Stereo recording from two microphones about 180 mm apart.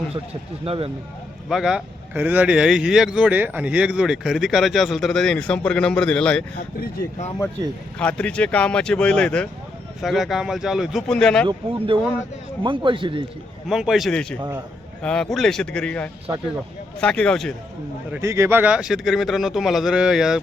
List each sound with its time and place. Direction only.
0.6 s speech: 30° right (ahead or behind)
1.5 s speech: centre (ahead or behind)
6.7 s speech: 60° left (ahead or behind)
7.9 s speech: 5° left (ahead or behind)
11.9 s a man's voice: 30° right (ahead or behind)
13.7 s speech: centre (ahead or behind)
18.1 s speech: 15° right (ahead or behind)